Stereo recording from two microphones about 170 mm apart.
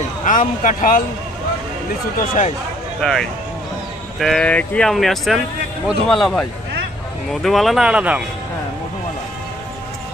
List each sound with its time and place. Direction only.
0.3 s speech: 50° left (ahead or behind)
3.0 s speech: 5° left (ahead or behind)